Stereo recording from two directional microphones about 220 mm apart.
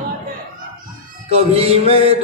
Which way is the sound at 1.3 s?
25° right (ahead or behind).